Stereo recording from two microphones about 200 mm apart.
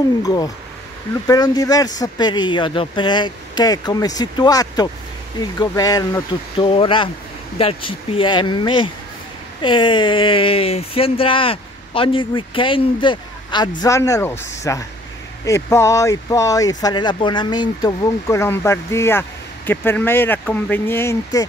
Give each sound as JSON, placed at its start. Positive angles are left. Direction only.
{"t": 0.2, "sound": "speech", "side_deg": 20}